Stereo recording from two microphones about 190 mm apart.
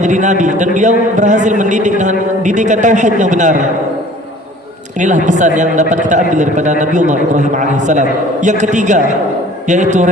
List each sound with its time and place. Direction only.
0.0 s a man's voice: 40° right (ahead or behind)
4.9 s a man's voice: 40° right (ahead or behind)